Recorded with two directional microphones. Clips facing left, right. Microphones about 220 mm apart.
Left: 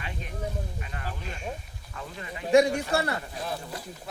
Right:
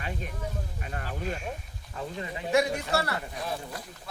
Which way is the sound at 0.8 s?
45° right (ahead or behind).